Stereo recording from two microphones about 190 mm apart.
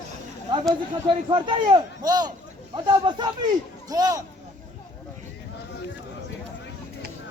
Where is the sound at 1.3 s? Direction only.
25° right (ahead or behind).